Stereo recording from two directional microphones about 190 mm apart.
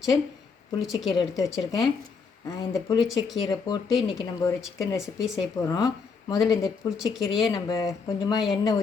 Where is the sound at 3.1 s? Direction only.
20° left (ahead or behind).